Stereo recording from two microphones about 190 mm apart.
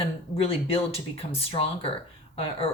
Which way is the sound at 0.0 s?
30° left (ahead or behind).